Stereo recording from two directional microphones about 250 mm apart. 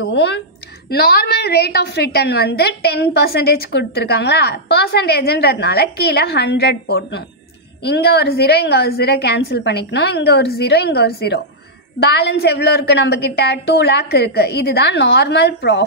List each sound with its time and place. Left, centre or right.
0.0 s a woman's voice: left